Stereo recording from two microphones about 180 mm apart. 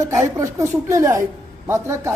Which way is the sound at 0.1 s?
15° right (ahead or behind).